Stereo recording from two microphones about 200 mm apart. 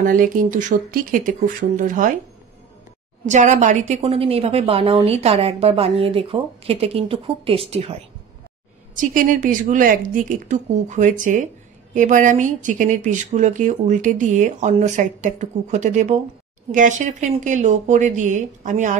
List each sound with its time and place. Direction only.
0.0 s speech: 45° right (ahead or behind)
3.3 s a woman's voice: 35° right (ahead or behind)
8.9 s speech: 40° right (ahead or behind)